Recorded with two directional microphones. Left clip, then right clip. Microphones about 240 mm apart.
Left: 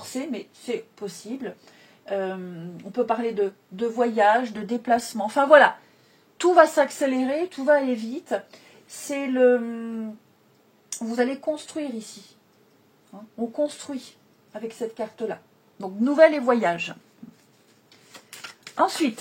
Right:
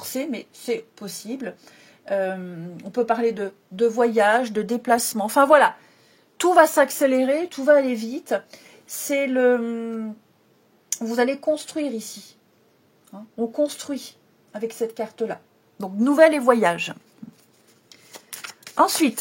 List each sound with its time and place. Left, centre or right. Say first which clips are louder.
0.0 s speech: right 3 dB; right
10.9 s speech: right 3 dB; right
13.6 s a woman's voice: right 2 dB; right
18.8 s speech: right 4 dB; right